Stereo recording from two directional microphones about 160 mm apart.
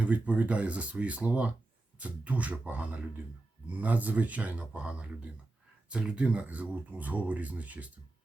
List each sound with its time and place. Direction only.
0.0 s speech: 10° right (ahead or behind)